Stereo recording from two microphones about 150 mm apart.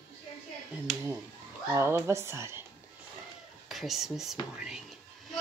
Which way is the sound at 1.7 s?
15° right (ahead or behind).